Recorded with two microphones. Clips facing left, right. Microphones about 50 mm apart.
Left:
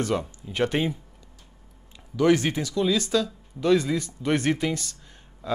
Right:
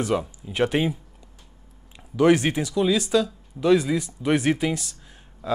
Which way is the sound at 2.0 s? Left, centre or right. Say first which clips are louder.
Right 2 dB; centre.